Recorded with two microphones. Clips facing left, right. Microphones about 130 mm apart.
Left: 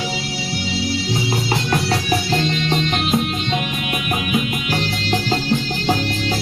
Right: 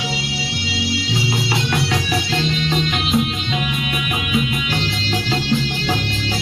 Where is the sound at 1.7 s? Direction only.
40° left (ahead or behind).